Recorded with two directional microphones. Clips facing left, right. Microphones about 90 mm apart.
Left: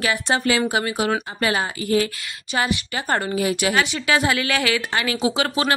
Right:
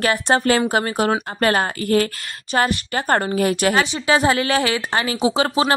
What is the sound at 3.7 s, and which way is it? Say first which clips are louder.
Speech: right 2 dB; 30° right (ahead or behind).